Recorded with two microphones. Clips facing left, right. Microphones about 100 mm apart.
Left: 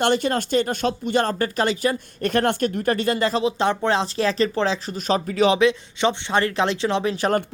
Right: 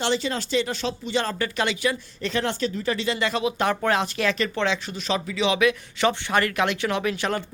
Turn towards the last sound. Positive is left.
turn(degrees=30)  # may be behind; listen again after turning